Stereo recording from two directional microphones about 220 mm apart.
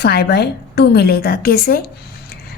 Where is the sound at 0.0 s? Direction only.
45° left (ahead or behind).